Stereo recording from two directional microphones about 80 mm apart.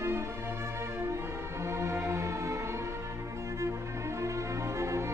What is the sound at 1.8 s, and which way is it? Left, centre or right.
Music, right.